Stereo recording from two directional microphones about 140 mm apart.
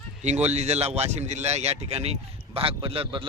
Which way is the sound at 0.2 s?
55° right (ahead or behind).